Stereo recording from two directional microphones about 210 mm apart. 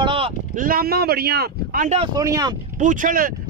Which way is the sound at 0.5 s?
40° right (ahead or behind).